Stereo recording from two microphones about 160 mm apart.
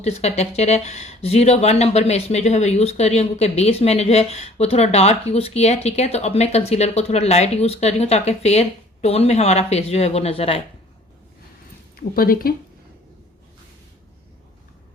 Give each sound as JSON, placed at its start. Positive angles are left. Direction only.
{"t": 0.0, "sound": "speech", "side_deg": 40}
{"t": 11.9, "sound": "a woman's voice", "side_deg": 65}